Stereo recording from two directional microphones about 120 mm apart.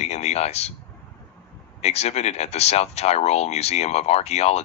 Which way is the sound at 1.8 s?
65° left (ahead or behind).